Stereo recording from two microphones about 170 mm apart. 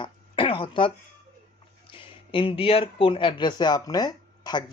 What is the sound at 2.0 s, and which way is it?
Speech, 30° left (ahead or behind).